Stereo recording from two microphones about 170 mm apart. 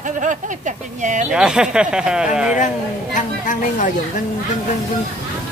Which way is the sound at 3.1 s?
50° left (ahead or behind).